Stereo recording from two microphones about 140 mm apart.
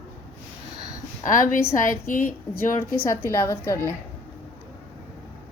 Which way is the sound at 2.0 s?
80° left.